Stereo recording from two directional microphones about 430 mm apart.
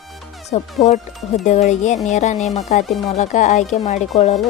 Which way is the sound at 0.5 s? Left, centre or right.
Centre.